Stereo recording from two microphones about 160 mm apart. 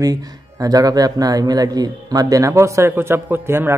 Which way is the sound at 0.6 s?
25° right (ahead or behind).